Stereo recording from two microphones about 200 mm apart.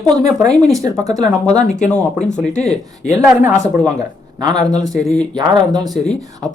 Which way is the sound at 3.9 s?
20° right (ahead or behind).